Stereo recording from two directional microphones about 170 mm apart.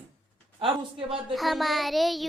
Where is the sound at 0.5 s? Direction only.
30° right (ahead or behind).